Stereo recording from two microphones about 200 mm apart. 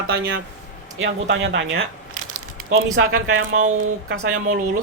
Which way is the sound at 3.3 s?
90° right.